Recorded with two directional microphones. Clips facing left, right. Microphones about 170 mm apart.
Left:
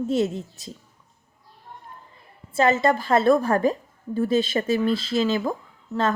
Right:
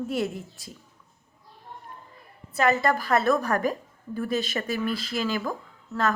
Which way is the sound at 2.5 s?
25° left (ahead or behind).